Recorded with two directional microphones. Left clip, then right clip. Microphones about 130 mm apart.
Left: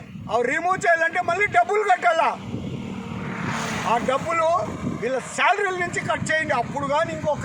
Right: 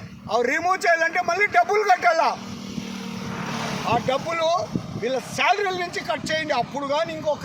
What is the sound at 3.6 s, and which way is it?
Vehicle, 90° left.